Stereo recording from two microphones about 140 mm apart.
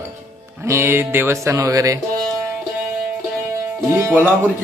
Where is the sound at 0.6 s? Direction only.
20° right (ahead or behind).